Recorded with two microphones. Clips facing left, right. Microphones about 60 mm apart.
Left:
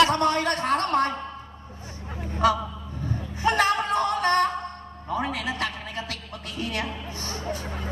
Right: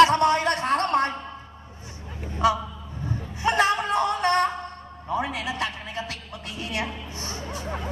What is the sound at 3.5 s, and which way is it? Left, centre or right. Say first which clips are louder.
Music: right 1 dB; right.